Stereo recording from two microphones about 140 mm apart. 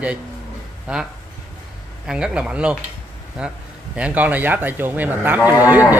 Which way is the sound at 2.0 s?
5° right (ahead or behind).